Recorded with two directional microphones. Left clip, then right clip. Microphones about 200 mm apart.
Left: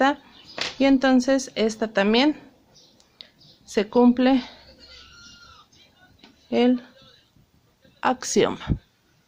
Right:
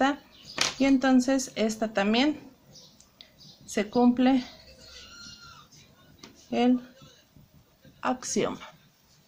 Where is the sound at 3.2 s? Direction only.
40° left (ahead or behind).